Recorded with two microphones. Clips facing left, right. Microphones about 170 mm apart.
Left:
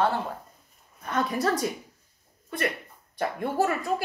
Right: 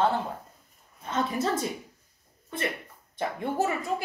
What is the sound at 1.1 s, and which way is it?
Speech, 25° right (ahead or behind).